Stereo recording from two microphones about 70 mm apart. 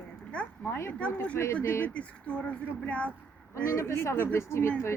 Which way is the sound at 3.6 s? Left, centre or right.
Left.